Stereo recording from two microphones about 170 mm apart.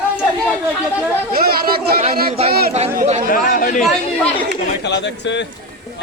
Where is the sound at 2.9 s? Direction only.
45° right (ahead or behind).